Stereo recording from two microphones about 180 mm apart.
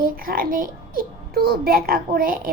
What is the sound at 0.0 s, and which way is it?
A child's voice, 50° right (ahead or behind).